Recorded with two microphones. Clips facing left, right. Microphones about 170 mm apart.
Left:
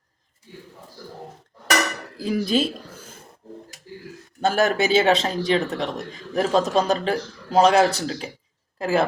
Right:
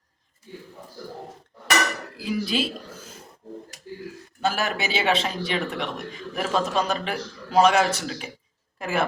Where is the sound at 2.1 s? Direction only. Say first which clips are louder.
Left 5 dB; 45° left (ahead or behind).